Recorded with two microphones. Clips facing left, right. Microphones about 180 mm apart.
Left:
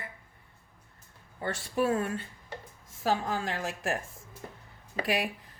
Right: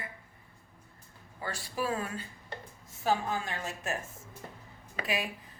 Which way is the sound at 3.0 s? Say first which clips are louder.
Left 1 dB; 90° left.